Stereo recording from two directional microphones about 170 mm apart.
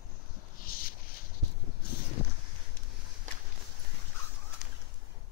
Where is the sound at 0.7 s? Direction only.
60° left (ahead or behind).